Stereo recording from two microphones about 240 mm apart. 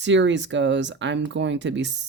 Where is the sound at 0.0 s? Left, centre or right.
Right.